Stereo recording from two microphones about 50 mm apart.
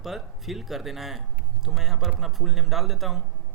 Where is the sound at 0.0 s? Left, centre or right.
Centre.